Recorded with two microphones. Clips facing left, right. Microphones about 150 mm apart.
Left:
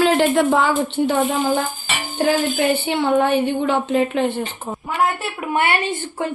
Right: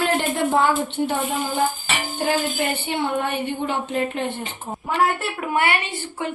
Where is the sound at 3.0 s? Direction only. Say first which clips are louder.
Left 7 dB; 90° left.